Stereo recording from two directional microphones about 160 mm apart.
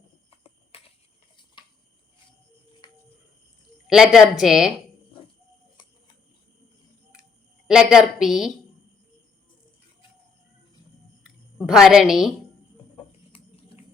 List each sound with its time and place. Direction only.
0.3 s a sound: 35° left (ahead or behind)
2.8 s cricket: 25° left (ahead or behind)
3.8 s a woman's voice: 5° right (ahead or behind)
7.7 s a woman's voice: 5° right (ahead or behind)
11.5 s a woman's voice: 5° right (ahead or behind)